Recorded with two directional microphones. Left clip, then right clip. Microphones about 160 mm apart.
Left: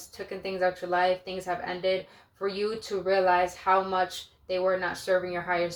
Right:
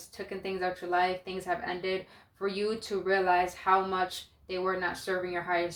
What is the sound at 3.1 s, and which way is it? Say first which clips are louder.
Speech: left 3 dB; 30° right (ahead or behind).